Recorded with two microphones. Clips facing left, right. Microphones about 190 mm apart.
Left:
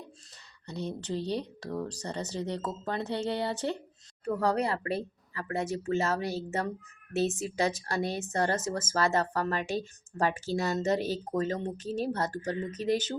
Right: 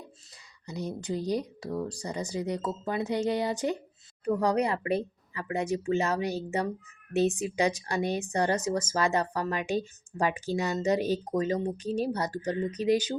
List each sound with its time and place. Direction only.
0.7 s speech: 10° right (ahead or behind)